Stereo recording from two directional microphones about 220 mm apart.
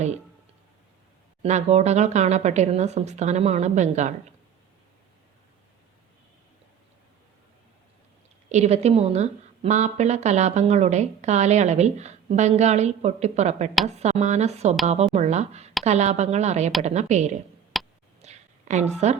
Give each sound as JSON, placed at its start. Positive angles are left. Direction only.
{"t": 1.4, "sound": "speech", "side_deg": -30}
{"t": 8.4, "sound": "speech", "side_deg": -30}
{"t": 17.7, "sound": "tick", "side_deg": 0}
{"t": 18.2, "sound": "a sound", "side_deg": -30}